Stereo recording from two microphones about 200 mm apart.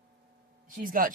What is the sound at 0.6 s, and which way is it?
Speech, 45° right (ahead or behind).